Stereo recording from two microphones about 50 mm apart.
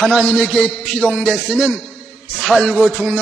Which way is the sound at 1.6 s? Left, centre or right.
Right.